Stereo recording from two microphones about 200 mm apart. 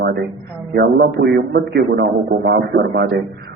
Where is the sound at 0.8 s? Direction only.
55° right (ahead or behind).